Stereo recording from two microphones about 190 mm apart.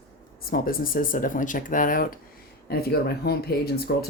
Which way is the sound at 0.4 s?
50° left (ahead or behind).